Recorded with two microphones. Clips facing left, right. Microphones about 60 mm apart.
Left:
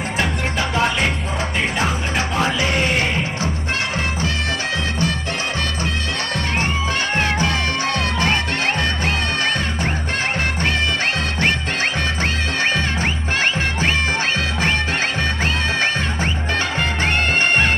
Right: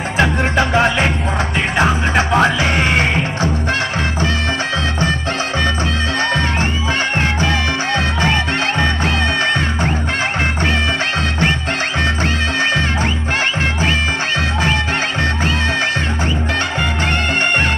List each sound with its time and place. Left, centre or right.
2.1 s music: right